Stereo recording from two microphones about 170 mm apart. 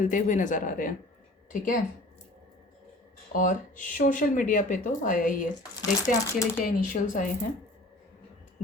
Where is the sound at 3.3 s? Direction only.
50° left (ahead or behind).